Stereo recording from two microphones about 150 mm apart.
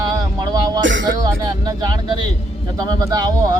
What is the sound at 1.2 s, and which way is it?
Speech, 25° right (ahead or behind).